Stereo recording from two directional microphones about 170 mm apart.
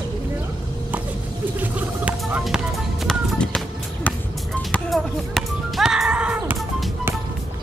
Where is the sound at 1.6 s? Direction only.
10° right (ahead or behind).